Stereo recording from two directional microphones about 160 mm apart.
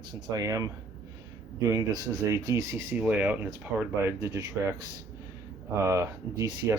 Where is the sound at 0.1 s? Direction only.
20° right (ahead or behind).